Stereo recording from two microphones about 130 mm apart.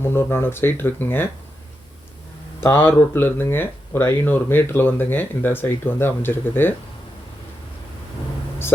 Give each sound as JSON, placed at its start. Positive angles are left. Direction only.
{"t": 0.0, "sound": "speech", "side_deg": 20}
{"t": 2.6, "sound": "speech", "side_deg": 15}